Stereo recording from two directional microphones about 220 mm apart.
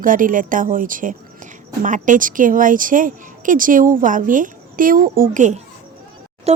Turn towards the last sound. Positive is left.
turn(degrees=-30)  # may be behind; listen again after turning